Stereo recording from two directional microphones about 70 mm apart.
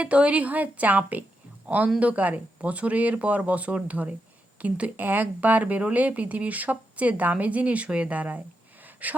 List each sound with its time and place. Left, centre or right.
0.0 s a man's voice: centre